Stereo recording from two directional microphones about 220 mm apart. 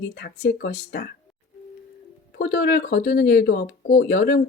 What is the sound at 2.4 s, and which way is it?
Speech, 45° left (ahead or behind).